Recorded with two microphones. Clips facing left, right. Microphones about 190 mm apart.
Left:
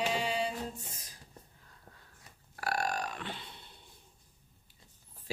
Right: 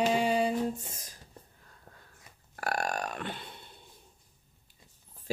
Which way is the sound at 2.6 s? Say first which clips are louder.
Right 2 dB; 50° right (ahead or behind).